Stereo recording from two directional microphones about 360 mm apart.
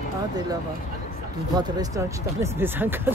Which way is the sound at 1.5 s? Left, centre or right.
Centre.